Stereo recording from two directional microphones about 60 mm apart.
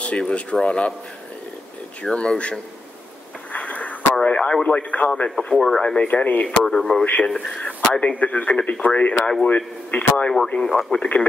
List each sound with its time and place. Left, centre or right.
0.0 s speech: centre
2.0 s speech: centre
3.5 s a sound: left
4.1 s speech: centre
5.6 s speech: centre; by 6.4 s left
6.4 s speech: centre; by 9.1 s left
9.1 s speech: centre
10.6 s speech: centre